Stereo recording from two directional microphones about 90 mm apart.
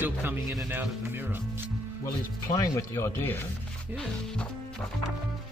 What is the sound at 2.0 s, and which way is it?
Speech, 40° left (ahead or behind).